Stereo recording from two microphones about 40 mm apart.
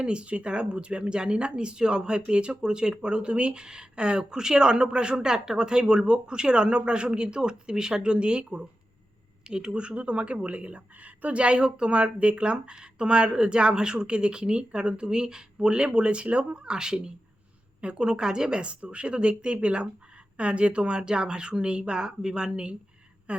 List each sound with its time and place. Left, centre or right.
0.0 s a woman's voice: right
18.7 s a woman's voice: right
23.3 s a sound: right